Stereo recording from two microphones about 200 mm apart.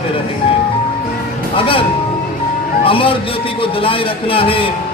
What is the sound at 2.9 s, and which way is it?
Speech, 25° left (ahead or behind).